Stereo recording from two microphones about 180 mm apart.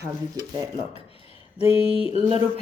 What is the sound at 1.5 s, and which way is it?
Mantra, 30° left (ahead or behind).